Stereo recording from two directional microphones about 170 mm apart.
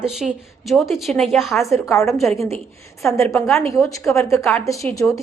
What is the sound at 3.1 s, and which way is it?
A woman's voice, 15° left (ahead or behind).